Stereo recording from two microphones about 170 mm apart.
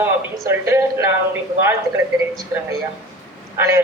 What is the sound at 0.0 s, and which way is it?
Speech, 15° right (ahead or behind).